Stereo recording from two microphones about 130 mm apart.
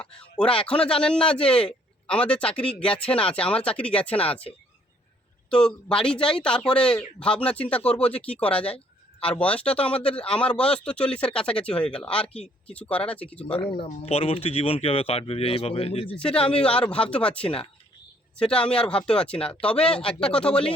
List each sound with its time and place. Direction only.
0.0 s a man's voice: 10° left (ahead or behind)
13.8 s speech: 50° left (ahead or behind)
16.1 s speech: 10° left (ahead or behind)